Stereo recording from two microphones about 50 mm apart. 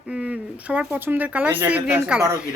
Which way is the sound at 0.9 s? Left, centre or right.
Right.